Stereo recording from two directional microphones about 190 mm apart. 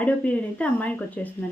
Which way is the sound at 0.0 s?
5° left (ahead or behind).